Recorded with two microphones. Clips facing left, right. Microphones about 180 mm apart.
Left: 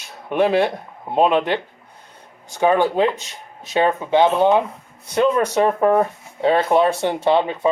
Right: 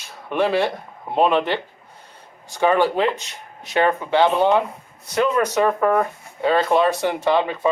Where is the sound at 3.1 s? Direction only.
15° right (ahead or behind).